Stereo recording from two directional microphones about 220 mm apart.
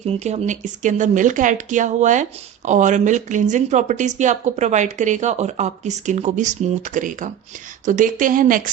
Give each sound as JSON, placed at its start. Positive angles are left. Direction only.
{"t": 0.0, "sound": "speech", "side_deg": -30}